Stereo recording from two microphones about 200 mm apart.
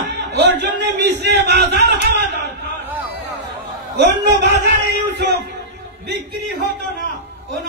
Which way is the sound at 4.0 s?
60° right (ahead or behind).